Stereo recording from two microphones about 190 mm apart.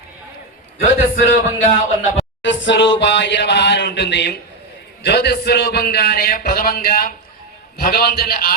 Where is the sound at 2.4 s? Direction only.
70° left (ahead or behind).